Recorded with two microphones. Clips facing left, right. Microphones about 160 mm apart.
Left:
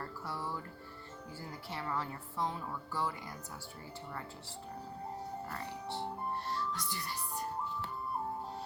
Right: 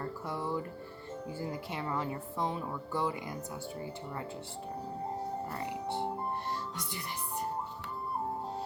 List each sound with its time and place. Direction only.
0.3 s a woman's voice: 20° right (ahead or behind)